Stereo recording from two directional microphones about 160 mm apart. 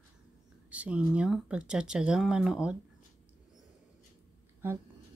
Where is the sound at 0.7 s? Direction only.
10° right (ahead or behind).